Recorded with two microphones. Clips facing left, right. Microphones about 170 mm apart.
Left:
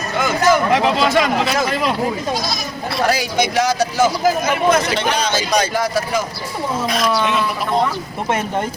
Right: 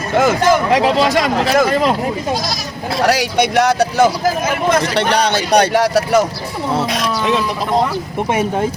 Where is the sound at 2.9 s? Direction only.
75° right (ahead or behind).